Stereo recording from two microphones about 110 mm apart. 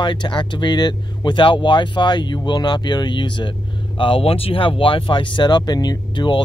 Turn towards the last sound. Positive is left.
turn(degrees=45)  # may be behind; listen again after turning